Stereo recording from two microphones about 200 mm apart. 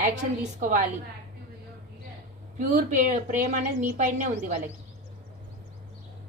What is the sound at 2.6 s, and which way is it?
Speech, 35° right (ahead or behind).